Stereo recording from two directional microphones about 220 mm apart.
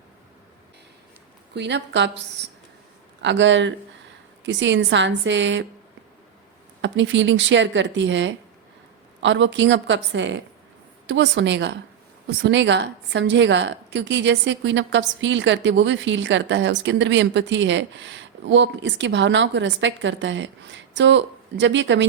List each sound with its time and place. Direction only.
1.5 s a woman's voice: 50° right (ahead or behind)
6.8 s a woman's voice: 55° right (ahead or behind)